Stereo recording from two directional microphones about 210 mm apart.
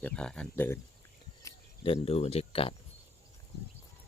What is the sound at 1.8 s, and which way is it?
Speech, 30° left (ahead or behind).